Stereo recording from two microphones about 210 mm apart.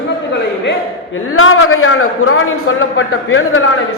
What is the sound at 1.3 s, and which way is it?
A man's voice, 75° left (ahead or behind).